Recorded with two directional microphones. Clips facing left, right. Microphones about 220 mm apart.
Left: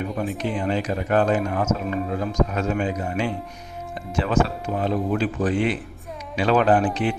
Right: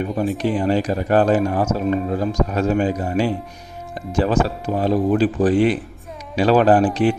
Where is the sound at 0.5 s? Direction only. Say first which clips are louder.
Right 5 dB; 35° right (ahead or behind).